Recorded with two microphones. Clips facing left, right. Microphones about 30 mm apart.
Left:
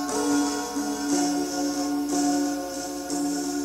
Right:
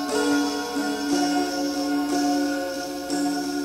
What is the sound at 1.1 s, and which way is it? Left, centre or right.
Music, right.